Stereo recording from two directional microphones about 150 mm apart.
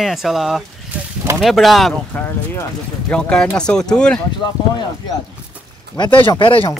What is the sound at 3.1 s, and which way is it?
Speech, 5° left (ahead or behind).